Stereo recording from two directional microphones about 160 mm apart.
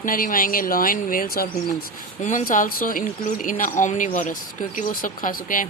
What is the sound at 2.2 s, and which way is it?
Speech, 50° left (ahead or behind).